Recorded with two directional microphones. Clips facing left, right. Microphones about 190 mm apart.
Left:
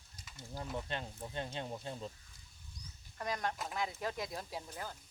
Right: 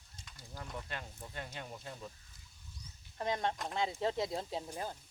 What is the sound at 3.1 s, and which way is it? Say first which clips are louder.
Speech: right 3 dB; 25° right (ahead or behind).